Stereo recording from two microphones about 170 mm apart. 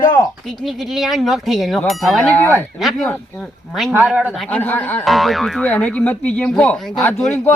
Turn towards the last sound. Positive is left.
turn(degrees=10)  # may be behind; listen again after turning